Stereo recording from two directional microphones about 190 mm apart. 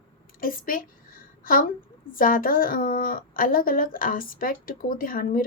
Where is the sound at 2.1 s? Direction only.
45° left (ahead or behind).